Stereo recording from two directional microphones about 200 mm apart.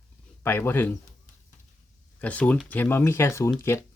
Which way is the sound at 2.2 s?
5° left (ahead or behind).